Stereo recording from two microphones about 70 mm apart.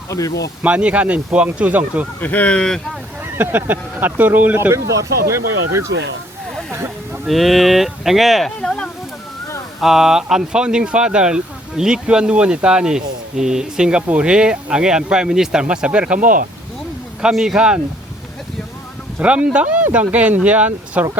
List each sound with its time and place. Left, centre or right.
0.1 s speech: left
0.6 s speech: centre
2.2 s speech: left
3.3 s speech: right
4.7 s speech: right
7.3 s speech: centre
9.8 s speech: centre
17.2 s speech: centre
19.2 s speech: centre